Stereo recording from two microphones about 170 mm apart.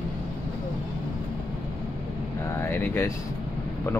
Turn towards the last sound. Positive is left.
turn(degrees=15)  # may be behind; listen again after turning